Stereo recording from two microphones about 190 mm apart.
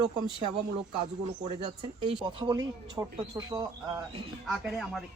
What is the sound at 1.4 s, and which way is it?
Speech, 30° right (ahead or behind).